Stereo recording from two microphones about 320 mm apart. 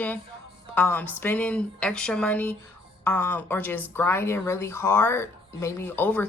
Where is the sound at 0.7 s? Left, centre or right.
Centre.